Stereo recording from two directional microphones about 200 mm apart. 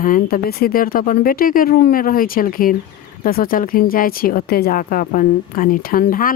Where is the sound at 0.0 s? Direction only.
45° left (ahead or behind).